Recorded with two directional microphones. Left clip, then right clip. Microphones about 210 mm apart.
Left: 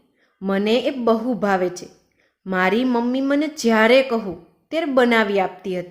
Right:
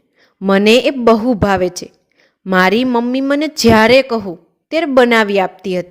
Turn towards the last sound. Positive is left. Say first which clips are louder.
# right 6 dB
turn(degrees=-45)  # may be behind; listen again after turning